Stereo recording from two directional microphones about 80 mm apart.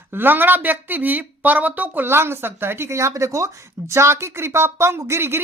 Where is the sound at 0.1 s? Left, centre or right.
Right.